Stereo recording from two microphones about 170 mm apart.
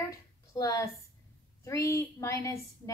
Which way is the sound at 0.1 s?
20° left (ahead or behind).